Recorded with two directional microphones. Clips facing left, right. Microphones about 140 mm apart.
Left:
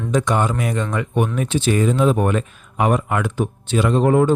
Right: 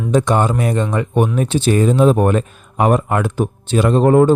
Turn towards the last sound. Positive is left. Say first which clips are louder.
# right 4 dB
turn(degrees=-35)  # may be behind; listen again after turning